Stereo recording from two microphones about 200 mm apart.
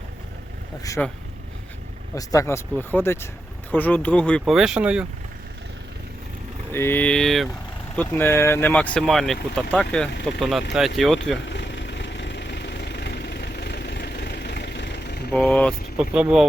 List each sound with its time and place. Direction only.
1.0 s speech: 5° left (ahead or behind)
2.1 s speech: 15° left (ahead or behind); by 5.0 s 5° right (ahead or behind)
6.7 s speech: 10° left (ahead or behind)
11.4 s vehicle: 65° left (ahead or behind)
15.3 s speech: 5° left (ahead or behind)